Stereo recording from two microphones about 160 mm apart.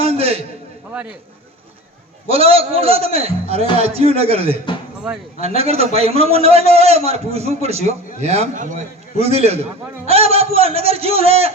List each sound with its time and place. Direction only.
0.0 s a sound: 40° right (ahead or behind)
2.3 s a man's voice: 35° right (ahead or behind)
5.5 s a man's voice: 40° right (ahead or behind)